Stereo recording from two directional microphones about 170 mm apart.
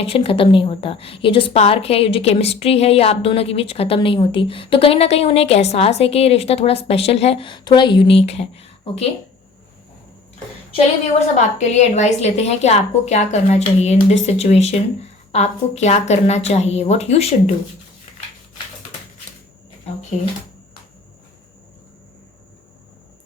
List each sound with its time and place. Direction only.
0.0 s a woman's voice: 35° left (ahead or behind)
11.3 s a woman's voice: 45° left (ahead or behind)